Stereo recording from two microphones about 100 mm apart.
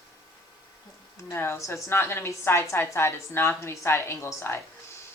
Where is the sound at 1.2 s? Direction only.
30° left (ahead or behind).